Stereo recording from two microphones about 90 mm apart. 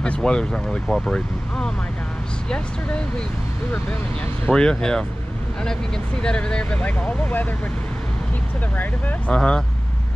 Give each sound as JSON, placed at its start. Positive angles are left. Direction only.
{"t": 0.0, "sound": "speech", "side_deg": 10}
{"t": 4.5, "sound": "speech", "side_deg": 10}
{"t": 6.2, "sound": "speech", "side_deg": 10}
{"t": 9.3, "sound": "speech", "side_deg": 10}